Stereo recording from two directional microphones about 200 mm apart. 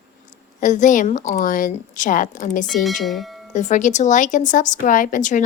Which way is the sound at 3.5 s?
35° left (ahead or behind).